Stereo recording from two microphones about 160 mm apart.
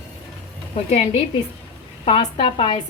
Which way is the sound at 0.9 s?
40° left (ahead or behind).